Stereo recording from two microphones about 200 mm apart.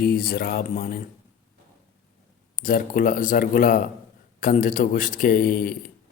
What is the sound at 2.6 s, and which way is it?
A man's voice, 45° left (ahead or behind).